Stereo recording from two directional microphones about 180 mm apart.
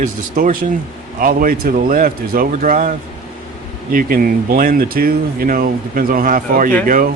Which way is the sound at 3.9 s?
50° right (ahead or behind).